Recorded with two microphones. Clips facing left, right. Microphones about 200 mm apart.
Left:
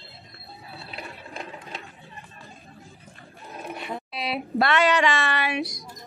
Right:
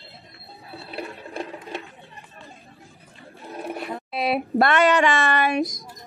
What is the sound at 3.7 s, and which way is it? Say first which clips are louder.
Roaring cats: right 2 dB; centre (ahead or behind).